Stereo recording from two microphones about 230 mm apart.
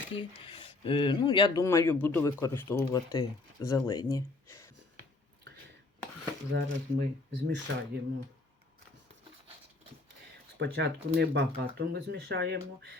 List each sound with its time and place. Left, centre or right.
0.1 s speech: left
6.5 s speech: right
10.6 s speech: right